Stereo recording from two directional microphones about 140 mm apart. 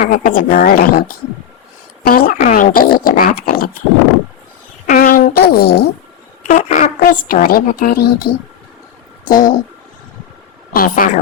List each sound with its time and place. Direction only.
0.1 s a woman's voice: 90° left
2.0 s a woman's voice: 90° left
4.9 s a sound: 80° left
6.5 s a woman's voice: 65° left (ahead or behind); by 8.3 s 90° left
9.2 s speech: 75° left (ahead or behind)
10.7 s speech: 90° left